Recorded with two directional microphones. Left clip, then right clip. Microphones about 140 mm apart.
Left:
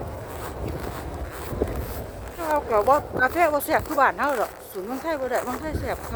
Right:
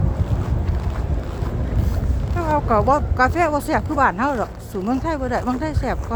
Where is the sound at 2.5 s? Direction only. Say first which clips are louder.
Right 2 dB; 10° right (ahead or behind).